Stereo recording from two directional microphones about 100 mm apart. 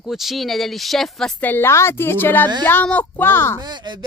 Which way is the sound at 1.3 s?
20° left (ahead or behind).